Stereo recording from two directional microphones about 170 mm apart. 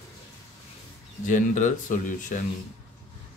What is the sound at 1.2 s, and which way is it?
Speech, 50° left (ahead or behind).